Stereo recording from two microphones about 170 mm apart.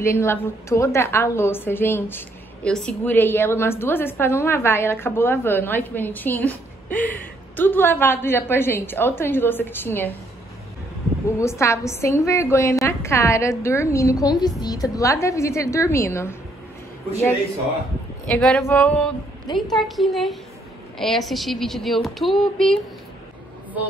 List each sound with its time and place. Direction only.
0.0 s a woman's voice: 15° left (ahead or behind)
11.2 s a woman's voice: 15° left (ahead or behind)
18.2 s a woman's voice: 5° left (ahead or behind)